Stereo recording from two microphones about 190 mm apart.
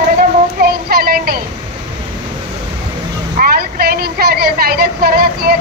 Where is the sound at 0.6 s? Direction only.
55° right (ahead or behind).